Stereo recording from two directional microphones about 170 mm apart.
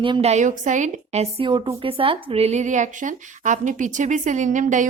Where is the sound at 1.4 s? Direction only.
30° right (ahead or behind); by 4.9 s 50° right (ahead or behind).